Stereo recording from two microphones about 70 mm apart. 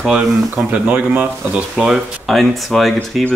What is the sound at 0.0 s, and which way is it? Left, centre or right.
Speech, centre.